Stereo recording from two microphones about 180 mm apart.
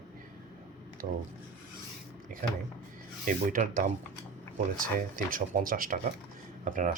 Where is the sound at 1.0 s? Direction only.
40° right (ahead or behind).